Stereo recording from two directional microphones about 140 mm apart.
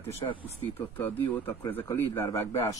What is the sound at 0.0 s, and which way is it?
Speech, 40° left (ahead or behind).